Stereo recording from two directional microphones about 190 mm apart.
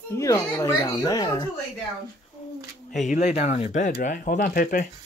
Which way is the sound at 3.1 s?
35° left (ahead or behind).